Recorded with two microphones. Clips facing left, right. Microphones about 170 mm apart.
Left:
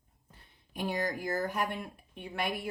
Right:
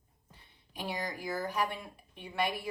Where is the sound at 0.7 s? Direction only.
50° left (ahead or behind).